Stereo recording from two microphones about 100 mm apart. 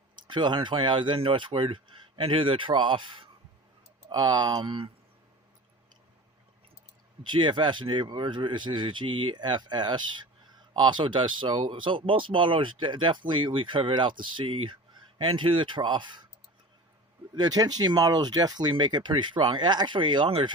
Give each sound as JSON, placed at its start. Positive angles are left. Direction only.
{"t": 0.2, "sound": "speech", "side_deg": -50}
{"t": 4.1, "sound": "speech", "side_deg": -45}
{"t": 7.3, "sound": "speech", "side_deg": -50}
{"t": 17.3, "sound": "speech", "side_deg": -40}